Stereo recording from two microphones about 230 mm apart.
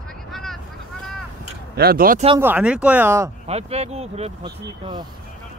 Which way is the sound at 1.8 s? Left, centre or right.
Right.